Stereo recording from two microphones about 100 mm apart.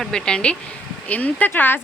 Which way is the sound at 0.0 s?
5° left (ahead or behind).